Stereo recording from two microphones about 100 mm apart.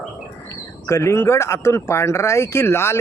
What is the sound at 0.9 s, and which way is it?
Speech, 30° left (ahead or behind).